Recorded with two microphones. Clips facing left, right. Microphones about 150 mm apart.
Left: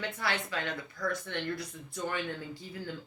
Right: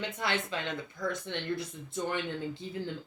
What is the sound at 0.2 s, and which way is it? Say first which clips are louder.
Speech: right 2 dB; 20° right (ahead or behind).